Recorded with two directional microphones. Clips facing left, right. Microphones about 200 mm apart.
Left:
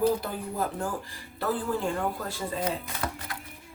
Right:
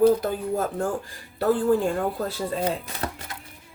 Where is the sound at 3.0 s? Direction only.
35° right (ahead or behind).